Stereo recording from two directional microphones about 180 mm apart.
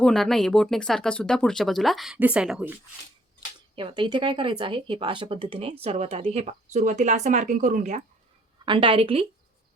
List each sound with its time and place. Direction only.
0.0 s speech: 5° left (ahead or behind)
3.8 s speech: 25° right (ahead or behind); by 8.0 s 45° right (ahead or behind)
8.6 s speech: 25° right (ahead or behind)